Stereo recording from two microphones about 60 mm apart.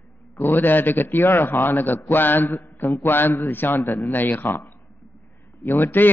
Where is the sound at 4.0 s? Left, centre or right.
Left.